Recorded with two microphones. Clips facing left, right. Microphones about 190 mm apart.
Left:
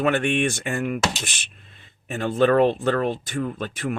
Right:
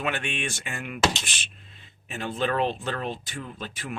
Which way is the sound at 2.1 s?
50° left (ahead or behind).